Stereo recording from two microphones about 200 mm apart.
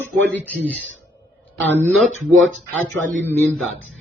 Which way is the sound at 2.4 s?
75° right (ahead or behind).